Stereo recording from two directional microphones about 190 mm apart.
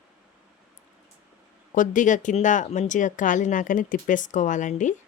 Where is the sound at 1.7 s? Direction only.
45° left (ahead or behind).